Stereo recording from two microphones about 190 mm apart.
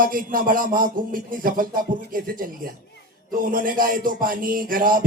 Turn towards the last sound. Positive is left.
turn(degrees=-45)  # may be behind; listen again after turning